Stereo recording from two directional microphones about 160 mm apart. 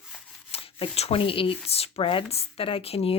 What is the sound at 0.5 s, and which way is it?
Speech, 35° left (ahead or behind).